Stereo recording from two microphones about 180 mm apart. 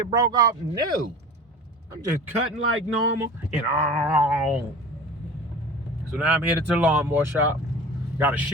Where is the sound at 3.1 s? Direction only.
15° right (ahead or behind).